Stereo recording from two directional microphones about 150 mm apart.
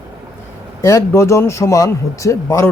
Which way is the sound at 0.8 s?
20° left (ahead or behind).